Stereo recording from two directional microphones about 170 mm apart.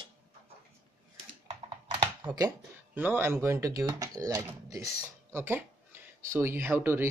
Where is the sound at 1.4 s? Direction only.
35° right (ahead or behind).